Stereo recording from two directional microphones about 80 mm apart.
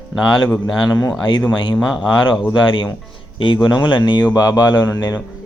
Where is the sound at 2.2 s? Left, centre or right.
Left.